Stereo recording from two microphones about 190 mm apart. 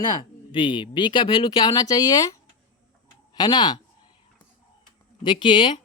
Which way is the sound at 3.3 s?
20° left (ahead or behind).